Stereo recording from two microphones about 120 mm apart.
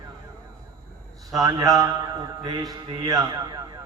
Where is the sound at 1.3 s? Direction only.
30° right (ahead or behind).